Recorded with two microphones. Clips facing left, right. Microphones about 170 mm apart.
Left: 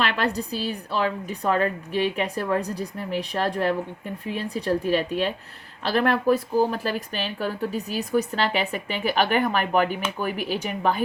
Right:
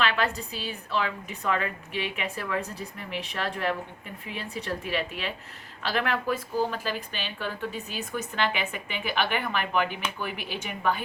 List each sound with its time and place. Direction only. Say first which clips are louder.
0.0 s speech: left 2 dB; 40° left (ahead or behind)